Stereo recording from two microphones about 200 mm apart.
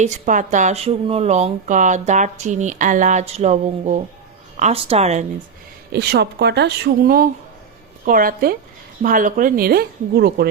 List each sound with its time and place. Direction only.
0.0 s speech: 40° right (ahead or behind)
5.9 s speech: 55° right (ahead or behind)